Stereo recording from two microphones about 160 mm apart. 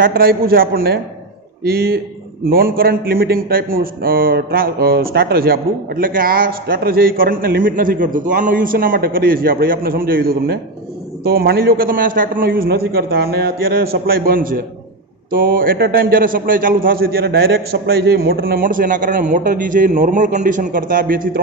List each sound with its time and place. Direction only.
0.0 s a man's voice: 70° right (ahead or behind)